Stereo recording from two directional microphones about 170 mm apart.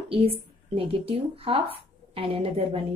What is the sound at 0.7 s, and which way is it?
Speech, 35° right (ahead or behind).